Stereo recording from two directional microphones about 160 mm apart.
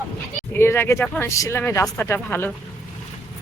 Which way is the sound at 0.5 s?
15° left (ahead or behind).